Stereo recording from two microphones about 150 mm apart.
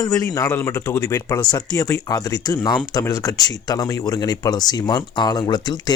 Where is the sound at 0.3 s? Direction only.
15° left (ahead or behind).